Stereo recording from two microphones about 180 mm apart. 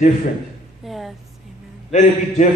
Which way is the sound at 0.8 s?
Centre (ahead or behind).